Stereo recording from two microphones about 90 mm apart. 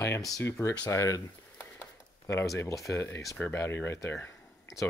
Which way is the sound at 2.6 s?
35° left (ahead or behind).